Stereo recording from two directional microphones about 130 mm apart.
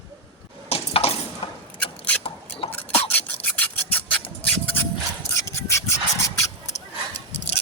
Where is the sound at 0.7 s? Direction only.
50° left (ahead or behind).